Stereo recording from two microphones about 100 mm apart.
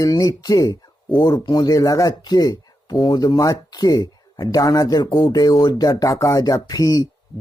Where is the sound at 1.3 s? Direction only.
45° left (ahead or behind).